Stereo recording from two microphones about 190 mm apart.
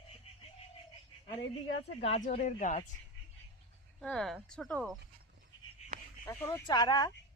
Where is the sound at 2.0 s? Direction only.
35° left (ahead or behind).